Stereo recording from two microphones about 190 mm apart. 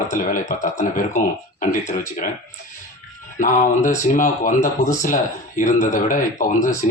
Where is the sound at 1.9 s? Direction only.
45° left (ahead or behind).